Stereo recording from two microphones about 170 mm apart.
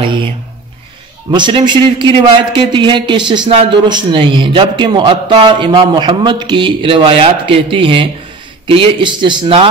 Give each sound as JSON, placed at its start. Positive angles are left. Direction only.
{"t": 1.3, "sound": "a man's voice", "side_deg": -25}